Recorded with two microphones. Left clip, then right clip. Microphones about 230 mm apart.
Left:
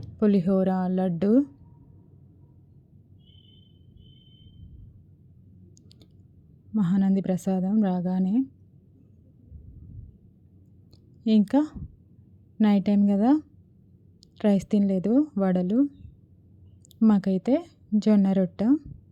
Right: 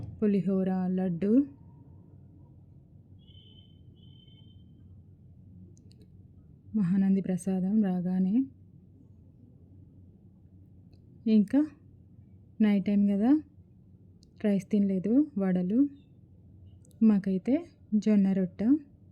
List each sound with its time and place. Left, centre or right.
0.2 s a woman's voice: left
6.7 s a woman's voice: left
11.2 s a woman's voice: left
17.0 s a woman's voice: left